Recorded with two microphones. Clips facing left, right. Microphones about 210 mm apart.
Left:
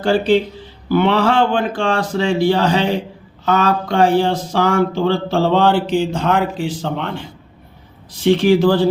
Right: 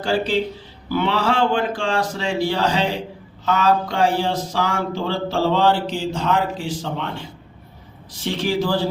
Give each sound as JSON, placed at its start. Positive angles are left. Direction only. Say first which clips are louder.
{"t": 0.9, "sound": "speech", "louder": "left 6 dB", "side_deg": 60}
{"t": 8.2, "sound": "speech", "louder": "left 10 dB", "side_deg": 60}